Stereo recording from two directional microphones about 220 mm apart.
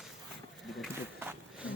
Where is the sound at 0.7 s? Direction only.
5° right (ahead or behind).